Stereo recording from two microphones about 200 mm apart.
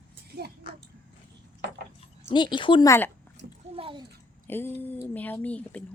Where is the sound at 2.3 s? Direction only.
25° left (ahead or behind).